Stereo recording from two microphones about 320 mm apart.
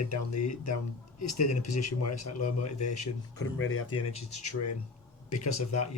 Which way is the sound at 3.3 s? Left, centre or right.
Left.